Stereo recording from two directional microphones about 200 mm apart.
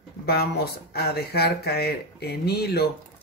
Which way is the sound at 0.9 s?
55° left (ahead or behind).